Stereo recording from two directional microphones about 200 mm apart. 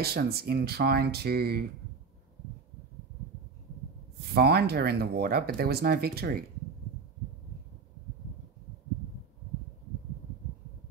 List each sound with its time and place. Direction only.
0.0 s speech: 50° right (ahead or behind)
4.3 s speech: 50° right (ahead or behind)